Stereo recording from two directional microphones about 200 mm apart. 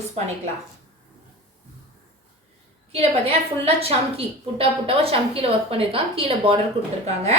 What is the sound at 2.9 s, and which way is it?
A woman's voice, 30° right (ahead or behind).